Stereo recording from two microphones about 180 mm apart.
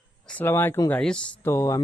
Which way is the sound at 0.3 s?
10° left (ahead or behind).